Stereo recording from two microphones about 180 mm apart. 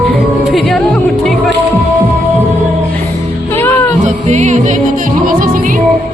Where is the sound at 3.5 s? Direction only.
10° left (ahead or behind).